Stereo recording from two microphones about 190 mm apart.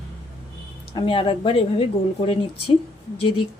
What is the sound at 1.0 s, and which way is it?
Speech, 25° left (ahead or behind).